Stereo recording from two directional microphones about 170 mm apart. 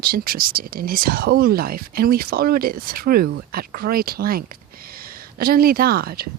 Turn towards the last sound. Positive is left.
turn(degrees=-60)  # may be behind; listen again after turning